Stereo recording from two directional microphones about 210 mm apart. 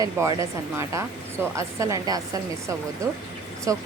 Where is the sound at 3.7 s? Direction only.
15° right (ahead or behind).